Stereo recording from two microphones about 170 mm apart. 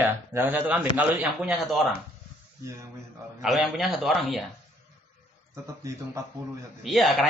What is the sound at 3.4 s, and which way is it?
A man's voice, centre (ahead or behind).